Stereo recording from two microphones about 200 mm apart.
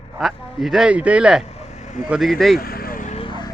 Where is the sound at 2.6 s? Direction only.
50° left (ahead or behind).